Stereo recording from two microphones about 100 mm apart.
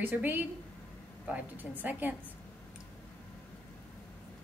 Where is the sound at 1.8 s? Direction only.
15° right (ahead or behind).